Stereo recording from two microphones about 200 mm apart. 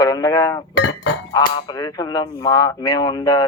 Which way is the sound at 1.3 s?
20° left (ahead or behind).